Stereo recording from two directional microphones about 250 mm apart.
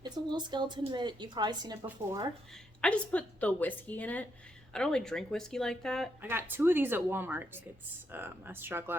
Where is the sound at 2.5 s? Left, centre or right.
Centre.